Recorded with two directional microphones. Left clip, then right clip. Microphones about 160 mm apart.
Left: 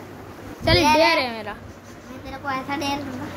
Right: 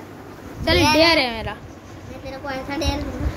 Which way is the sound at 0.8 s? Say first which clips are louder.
Right 3 dB; 10° right (ahead or behind).